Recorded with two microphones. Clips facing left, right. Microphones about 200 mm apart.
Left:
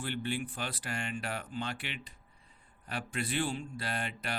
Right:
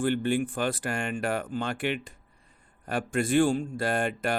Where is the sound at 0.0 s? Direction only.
50° right (ahead or behind).